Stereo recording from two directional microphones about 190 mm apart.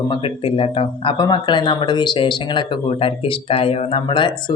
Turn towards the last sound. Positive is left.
turn(degrees=25)  # may be behind; listen again after turning